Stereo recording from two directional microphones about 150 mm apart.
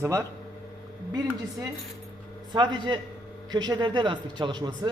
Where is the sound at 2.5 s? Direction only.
30° right (ahead or behind).